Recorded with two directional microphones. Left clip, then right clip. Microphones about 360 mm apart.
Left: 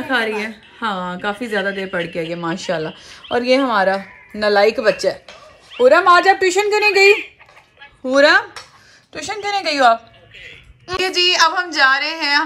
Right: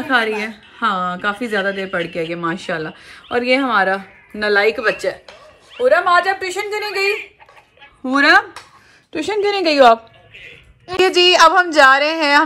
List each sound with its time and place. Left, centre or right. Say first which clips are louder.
0.0 s a woman's voice: right 2 dB; centre; by 7.1 s left
8.0 s a woman's voice: even; centre